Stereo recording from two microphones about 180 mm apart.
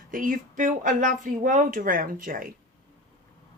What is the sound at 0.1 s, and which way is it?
Speech, 45° right (ahead or behind).